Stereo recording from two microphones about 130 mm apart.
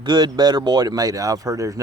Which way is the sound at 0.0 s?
35° right (ahead or behind).